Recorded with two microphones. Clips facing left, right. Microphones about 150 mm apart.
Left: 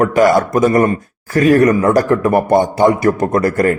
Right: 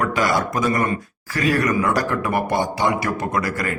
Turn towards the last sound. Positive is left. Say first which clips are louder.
# left 10 dB
turn(degrees=50)  # may be behind; listen again after turning